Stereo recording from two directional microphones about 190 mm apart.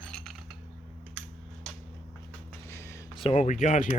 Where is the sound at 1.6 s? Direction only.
5° left (ahead or behind).